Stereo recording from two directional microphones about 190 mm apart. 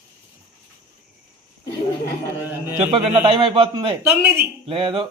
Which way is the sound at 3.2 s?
30° right (ahead or behind).